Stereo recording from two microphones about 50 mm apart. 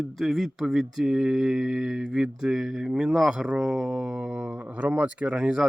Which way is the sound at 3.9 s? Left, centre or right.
Centre.